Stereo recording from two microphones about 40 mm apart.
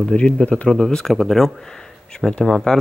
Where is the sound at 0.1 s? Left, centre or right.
Left.